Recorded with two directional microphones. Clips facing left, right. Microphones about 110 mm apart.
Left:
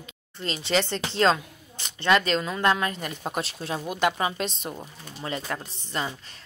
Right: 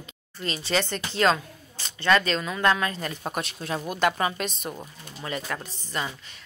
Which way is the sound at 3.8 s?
20° left (ahead or behind).